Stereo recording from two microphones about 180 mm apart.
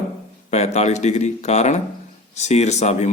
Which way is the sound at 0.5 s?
40° left (ahead or behind).